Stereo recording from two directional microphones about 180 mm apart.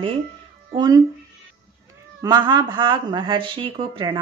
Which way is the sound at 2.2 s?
20° right (ahead or behind).